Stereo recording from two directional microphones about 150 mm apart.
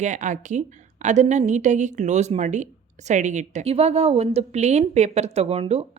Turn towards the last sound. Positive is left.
turn(degrees=-45)  # may be behind; listen again after turning